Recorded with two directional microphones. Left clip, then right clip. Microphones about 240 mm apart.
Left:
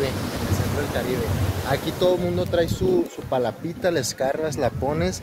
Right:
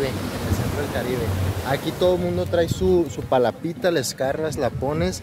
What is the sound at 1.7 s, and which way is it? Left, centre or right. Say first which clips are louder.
Speech: right 1 dB; centre.